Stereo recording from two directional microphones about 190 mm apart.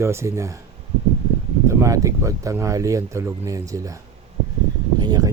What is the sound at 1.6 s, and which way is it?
Speech, 15° right (ahead or behind).